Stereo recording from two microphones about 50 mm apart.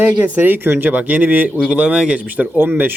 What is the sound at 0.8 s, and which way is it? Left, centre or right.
Speech, right.